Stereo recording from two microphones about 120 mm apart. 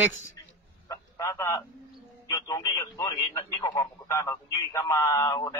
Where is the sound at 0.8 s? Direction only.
25° left (ahead or behind).